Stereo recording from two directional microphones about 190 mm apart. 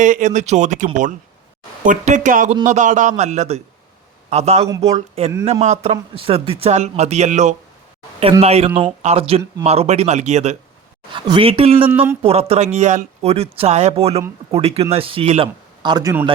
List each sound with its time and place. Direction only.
0.0 s speech: 40° right (ahead or behind)
11.9 s speech: 10° right (ahead or behind)
12.2 s speech: 30° right (ahead or behind)